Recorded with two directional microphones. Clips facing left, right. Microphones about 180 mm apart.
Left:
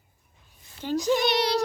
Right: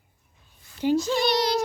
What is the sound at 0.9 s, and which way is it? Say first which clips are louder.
Speech: left 1 dB; 15° left (ahead or behind).